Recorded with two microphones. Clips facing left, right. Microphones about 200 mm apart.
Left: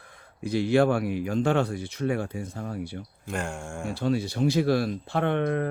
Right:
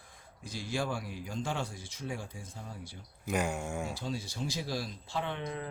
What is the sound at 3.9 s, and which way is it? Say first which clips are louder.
Speech: left 12 dB; 65° left (ahead or behind).